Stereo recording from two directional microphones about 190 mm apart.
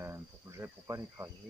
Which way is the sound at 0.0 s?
15° right (ahead or behind).